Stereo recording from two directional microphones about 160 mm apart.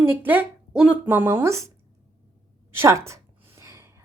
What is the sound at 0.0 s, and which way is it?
A woman's voice, 15° right (ahead or behind).